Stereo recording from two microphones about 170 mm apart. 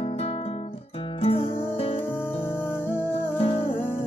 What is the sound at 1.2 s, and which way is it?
Music, 35° left (ahead or behind).